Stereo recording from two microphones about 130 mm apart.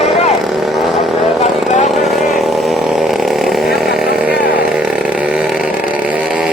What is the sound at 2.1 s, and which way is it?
Chainsaw, centre (ahead or behind).